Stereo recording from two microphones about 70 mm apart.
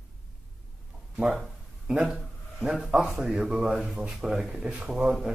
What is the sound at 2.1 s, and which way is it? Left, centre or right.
Speech, centre.